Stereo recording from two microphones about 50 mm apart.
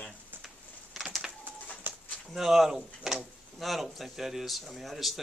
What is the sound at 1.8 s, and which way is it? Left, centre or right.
Bird, right.